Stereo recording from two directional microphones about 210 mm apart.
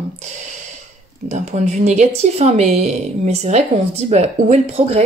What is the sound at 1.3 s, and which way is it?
Speech, 35° right (ahead or behind).